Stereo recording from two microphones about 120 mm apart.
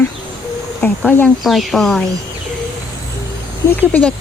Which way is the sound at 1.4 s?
Centre (ahead or behind).